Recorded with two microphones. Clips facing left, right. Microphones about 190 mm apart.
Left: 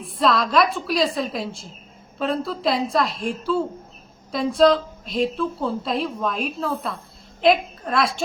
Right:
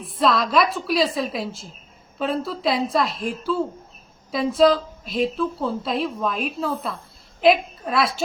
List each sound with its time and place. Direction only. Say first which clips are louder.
0.0 s a woman's voice: even; centre (ahead or behind)